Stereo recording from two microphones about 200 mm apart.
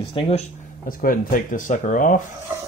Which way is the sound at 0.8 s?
45° left (ahead or behind).